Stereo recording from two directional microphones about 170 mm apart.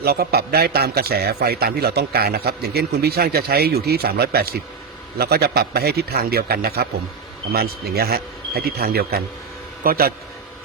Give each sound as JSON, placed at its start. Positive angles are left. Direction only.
{"t": 0.0, "sound": "a man's voice", "side_deg": -65}